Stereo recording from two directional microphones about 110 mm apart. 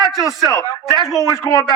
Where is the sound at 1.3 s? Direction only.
35° left (ahead or behind).